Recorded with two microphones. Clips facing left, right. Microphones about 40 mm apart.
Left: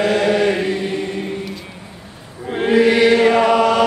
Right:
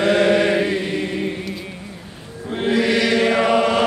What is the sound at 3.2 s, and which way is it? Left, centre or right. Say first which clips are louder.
Chant: left 3 dB; centre.